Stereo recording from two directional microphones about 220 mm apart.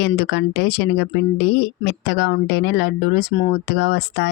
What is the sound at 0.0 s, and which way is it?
Speech, 50° left (ahead or behind).